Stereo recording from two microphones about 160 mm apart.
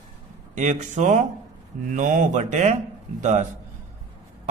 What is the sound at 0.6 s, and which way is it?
Speech, 50° right (ahead or behind).